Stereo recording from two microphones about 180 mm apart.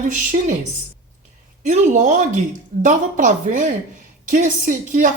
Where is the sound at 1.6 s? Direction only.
45° right (ahead or behind).